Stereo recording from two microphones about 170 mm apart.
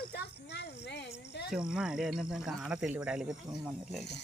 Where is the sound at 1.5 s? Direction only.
5° right (ahead or behind).